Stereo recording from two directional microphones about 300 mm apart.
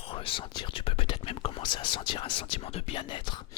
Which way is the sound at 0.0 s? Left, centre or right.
Centre.